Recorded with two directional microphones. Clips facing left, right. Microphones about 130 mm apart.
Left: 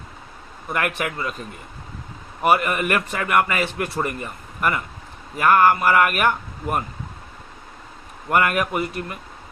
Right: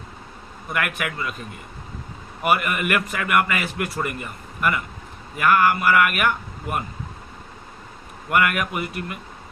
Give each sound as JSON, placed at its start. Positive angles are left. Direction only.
{"t": 0.7, "sound": "a man's voice", "side_deg": 35}
{"t": 2.4, "sound": "a man's voice", "side_deg": 35}
{"t": 8.3, "sound": "a man's voice", "side_deg": 35}